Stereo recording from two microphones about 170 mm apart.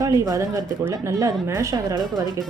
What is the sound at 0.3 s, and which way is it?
Speech, 20° right (ahead or behind).